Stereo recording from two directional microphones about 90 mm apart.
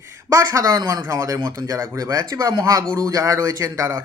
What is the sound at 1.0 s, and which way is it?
Speech, 25° right (ahead or behind).